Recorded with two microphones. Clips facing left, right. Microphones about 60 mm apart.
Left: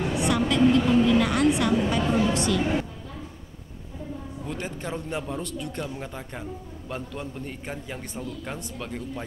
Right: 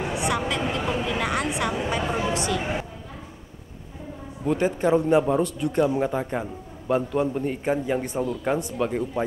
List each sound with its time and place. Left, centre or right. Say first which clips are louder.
0.0 s a woman's voice: left 1 dB; centre
4.5 s a man's voice: right 12 dB; centre